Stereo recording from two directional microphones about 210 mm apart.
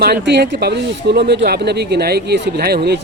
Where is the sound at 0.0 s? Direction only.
50° right (ahead or behind).